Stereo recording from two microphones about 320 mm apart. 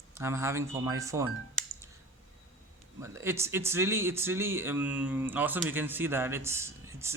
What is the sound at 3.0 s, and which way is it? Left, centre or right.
A man's voice, centre.